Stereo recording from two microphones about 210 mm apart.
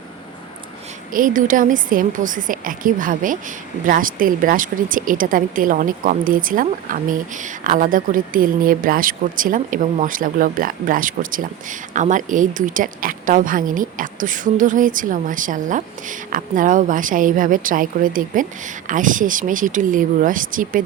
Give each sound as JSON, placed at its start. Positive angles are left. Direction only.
{"t": 1.1, "sound": "speech", "side_deg": -40}